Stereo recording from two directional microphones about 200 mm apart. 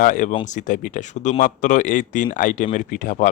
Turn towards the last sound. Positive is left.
turn(degrees=40)  # may be behind; listen again after turning